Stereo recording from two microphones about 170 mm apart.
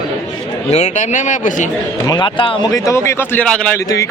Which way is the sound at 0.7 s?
40° left (ahead or behind).